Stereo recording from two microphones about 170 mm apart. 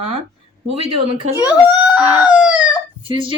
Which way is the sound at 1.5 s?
5° right (ahead or behind).